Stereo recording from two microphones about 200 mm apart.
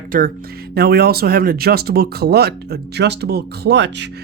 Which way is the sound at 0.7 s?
50° right (ahead or behind).